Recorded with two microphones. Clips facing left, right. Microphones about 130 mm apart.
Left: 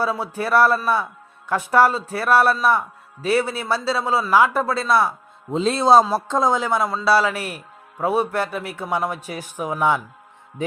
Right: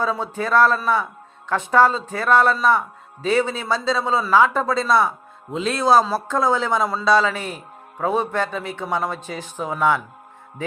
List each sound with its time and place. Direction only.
0.0 s a man's voice: 10° left (ahead or behind)
5.5 s a man's voice: 30° left (ahead or behind)